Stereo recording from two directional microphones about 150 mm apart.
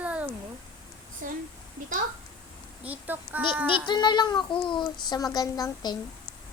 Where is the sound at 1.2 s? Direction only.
60° right (ahead or behind).